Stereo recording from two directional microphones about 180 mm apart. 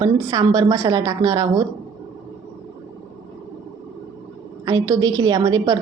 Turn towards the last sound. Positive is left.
turn(degrees=-20)  # may be behind; listen again after turning